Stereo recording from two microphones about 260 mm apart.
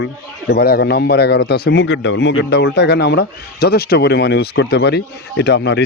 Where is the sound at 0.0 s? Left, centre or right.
Left.